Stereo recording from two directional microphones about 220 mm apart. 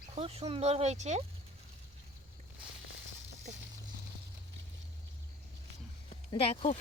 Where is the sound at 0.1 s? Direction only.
25° right (ahead or behind).